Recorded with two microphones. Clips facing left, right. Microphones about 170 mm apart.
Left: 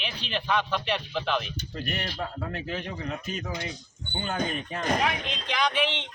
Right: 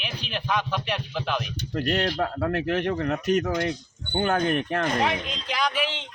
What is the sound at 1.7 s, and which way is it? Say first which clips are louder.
Speech: right 10 dB; 70° right (ahead or behind).